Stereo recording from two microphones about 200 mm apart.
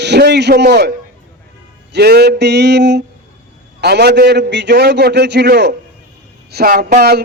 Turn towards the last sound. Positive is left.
turn(degrees=-50)  # may be behind; listen again after turning